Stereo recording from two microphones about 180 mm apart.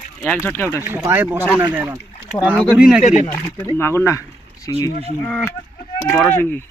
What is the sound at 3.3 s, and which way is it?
Speech, 10° left (ahead or behind).